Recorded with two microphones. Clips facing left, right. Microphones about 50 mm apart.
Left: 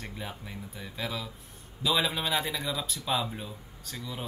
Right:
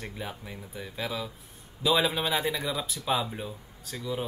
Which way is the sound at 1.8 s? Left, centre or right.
Centre.